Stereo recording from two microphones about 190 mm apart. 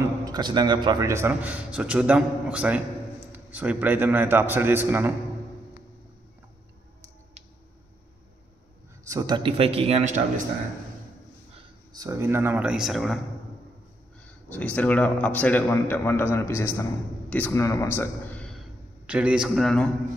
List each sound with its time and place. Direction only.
0.0 s a man's voice: 20° right (ahead or behind)
9.0 s a man's voice: 20° right (ahead or behind); by 10.2 s 35° right (ahead or behind)
11.9 s a man's voice: 20° right (ahead or behind); by 13.2 s centre (ahead or behind)
14.2 s a man's voice: 10° left (ahead or behind)
19.0 s a man's voice: 5° right (ahead or behind)